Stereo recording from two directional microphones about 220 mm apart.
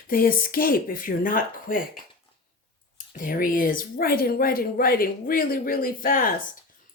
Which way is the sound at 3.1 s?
40° left (ahead or behind).